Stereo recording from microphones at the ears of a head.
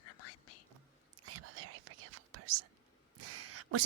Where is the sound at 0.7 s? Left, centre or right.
Right.